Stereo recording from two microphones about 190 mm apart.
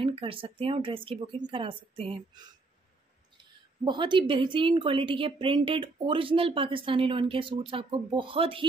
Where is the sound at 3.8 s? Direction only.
25° right (ahead or behind).